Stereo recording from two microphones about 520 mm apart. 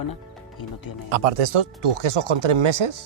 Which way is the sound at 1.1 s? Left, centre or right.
Right.